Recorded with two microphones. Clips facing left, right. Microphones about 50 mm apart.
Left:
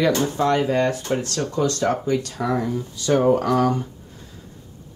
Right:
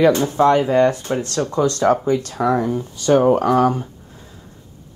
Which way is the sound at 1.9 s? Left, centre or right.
Right.